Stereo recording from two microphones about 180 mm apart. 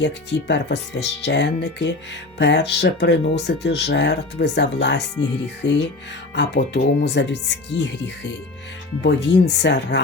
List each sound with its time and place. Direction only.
0.0 s speech: 75° left (ahead or behind)